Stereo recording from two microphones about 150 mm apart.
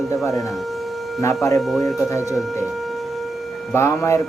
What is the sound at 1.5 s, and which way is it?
Speech, centre (ahead or behind).